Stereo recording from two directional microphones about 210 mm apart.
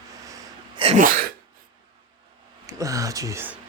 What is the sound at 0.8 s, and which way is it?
Sneeze, 30° right (ahead or behind).